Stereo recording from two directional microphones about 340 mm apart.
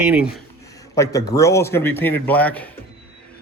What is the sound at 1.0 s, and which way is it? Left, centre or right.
A man's voice, centre.